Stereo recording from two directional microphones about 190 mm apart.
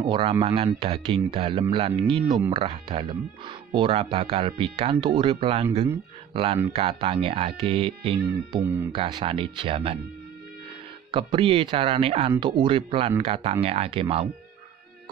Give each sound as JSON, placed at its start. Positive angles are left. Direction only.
{"t": 0.0, "sound": "speech", "side_deg": -25}
{"t": 11.1, "sound": "speech", "side_deg": -25}